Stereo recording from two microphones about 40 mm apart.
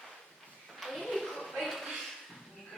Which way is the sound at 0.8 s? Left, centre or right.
Centre.